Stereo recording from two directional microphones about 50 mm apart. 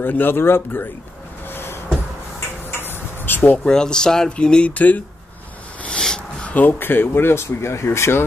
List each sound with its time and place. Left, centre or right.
0.0 s speech: left
1.5 s a sound: left
3.5 s speech: centre
4.7 s speech: left
5.9 s a sound: centre
6.4 s speech: left